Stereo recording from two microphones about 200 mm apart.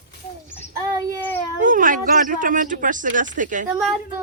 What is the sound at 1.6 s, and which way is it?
Speech, 40° right (ahead or behind).